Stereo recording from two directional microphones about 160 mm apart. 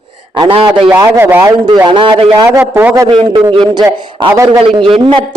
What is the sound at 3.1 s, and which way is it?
Speech, 30° right (ahead or behind).